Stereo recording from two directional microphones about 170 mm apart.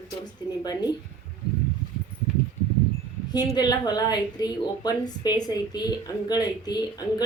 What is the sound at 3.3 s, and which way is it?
Speech, 25° left (ahead or behind).